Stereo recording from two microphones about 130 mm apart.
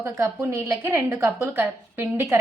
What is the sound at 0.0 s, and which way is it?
Speech, 20° right (ahead or behind).